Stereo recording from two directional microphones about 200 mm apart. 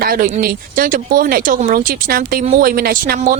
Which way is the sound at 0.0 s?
45° right (ahead or behind).